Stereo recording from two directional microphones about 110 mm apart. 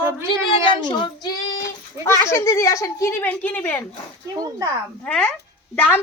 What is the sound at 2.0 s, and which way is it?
Speech, 25° left (ahead or behind).